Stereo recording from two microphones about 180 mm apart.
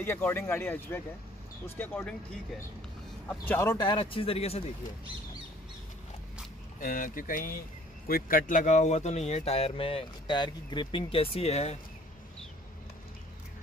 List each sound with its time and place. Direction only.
0.0 s speech: 10° left (ahead or behind); by 4.6 s 35° left (ahead or behind)
6.8 s speech: 50° left (ahead or behind)